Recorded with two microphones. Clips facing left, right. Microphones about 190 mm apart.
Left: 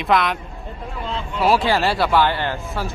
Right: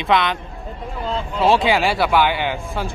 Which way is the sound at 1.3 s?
25° right (ahead or behind).